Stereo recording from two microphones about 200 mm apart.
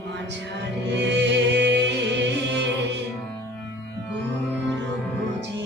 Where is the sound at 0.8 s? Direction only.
60° right (ahead or behind).